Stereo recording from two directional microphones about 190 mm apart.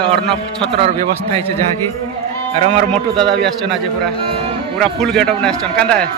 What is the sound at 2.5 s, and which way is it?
Speech, 35° right (ahead or behind).